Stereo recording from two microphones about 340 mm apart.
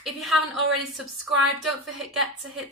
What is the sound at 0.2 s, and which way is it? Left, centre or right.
Speech, centre.